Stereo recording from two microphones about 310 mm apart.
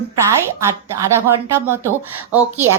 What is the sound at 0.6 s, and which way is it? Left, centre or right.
Speech, centre.